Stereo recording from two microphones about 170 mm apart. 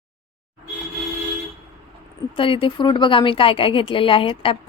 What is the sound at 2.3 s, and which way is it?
A woman's voice, 30° left (ahead or behind).